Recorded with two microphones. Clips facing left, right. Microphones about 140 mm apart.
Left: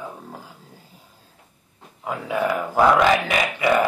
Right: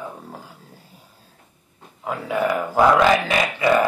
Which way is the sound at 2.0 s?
15° left (ahead or behind).